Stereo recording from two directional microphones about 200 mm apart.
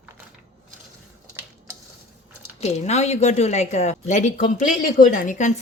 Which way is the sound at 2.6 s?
35° left (ahead or behind).